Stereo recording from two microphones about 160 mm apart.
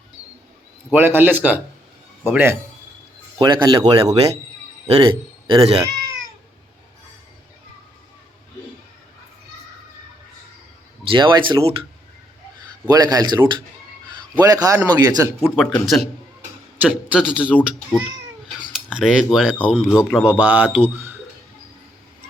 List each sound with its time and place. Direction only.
0.9 s speech: 15° right (ahead or behind)
3.3 s a man's voice: 25° right (ahead or behind)
11.1 s speech: 30° right (ahead or behind)
12.9 s speech: 25° right (ahead or behind)
15.4 s speech: 5° left (ahead or behind)
16.8 s speech: 10° right (ahead or behind)
18.9 s speech: centre (ahead or behind)
20.2 s speech: 10° right (ahead or behind)